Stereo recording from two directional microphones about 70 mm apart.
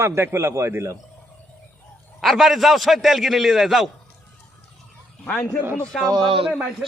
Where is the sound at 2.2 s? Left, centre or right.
Centre.